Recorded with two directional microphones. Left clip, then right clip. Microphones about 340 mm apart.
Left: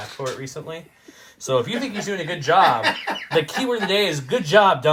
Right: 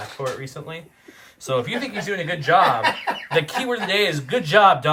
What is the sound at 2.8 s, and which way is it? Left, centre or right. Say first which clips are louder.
Speech: right 1 dB; right.